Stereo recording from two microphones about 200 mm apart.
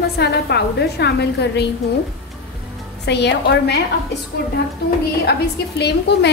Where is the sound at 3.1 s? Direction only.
55° left (ahead or behind).